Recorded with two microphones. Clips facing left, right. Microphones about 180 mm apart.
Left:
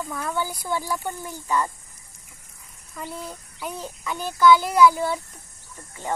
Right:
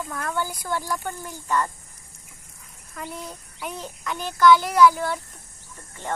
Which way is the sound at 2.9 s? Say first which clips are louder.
Left 1 dB; 10° left (ahead or behind).